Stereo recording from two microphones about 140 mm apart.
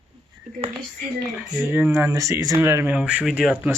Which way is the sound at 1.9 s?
20° right (ahead or behind).